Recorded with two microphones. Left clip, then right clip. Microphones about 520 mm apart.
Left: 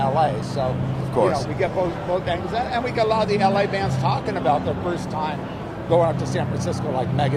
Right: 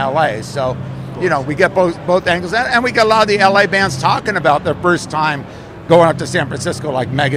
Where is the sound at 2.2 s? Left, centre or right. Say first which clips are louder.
Right 9 dB; right.